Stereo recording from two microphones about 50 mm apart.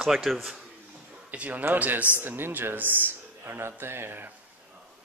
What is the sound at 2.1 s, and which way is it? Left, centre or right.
Speech, right.